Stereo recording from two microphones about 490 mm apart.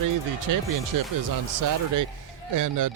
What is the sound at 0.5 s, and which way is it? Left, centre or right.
Speech, right.